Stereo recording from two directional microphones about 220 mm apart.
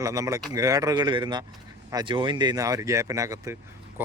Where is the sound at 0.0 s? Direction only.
15° right (ahead or behind).